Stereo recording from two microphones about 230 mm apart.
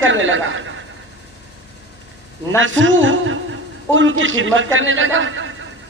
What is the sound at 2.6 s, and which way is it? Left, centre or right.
A man's voice, right.